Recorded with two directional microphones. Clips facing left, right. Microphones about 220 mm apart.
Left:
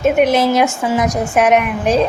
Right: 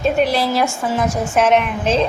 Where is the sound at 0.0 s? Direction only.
20° left (ahead or behind).